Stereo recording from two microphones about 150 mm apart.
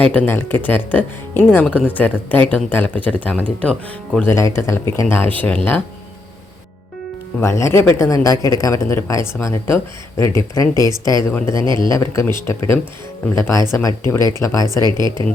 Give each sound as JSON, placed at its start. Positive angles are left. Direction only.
{"t": 0.0, "sound": "speech", "side_deg": 10}
{"t": 7.4, "sound": "speech", "side_deg": 20}
{"t": 14.8, "sound": "speech", "side_deg": -30}